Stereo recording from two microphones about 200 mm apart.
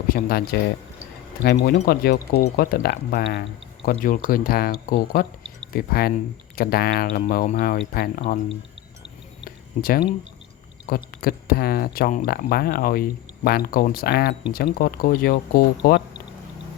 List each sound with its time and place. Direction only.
0.1 s speech: 50° left (ahead or behind)
1.5 s speech: 55° left (ahead or behind)
9.4 s a sound: 45° left (ahead or behind)
10.8 s speech: 50° left (ahead or behind)